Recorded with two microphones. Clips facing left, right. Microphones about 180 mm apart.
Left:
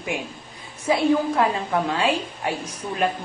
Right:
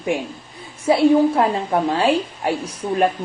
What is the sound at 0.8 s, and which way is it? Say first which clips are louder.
A woman's voice: right 6 dB; 30° right (ahead or behind).